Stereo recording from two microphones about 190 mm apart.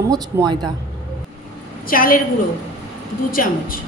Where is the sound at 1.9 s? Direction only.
50° left (ahead or behind).